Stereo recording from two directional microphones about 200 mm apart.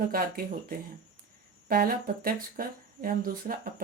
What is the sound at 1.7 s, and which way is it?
Speech, 50° right (ahead or behind).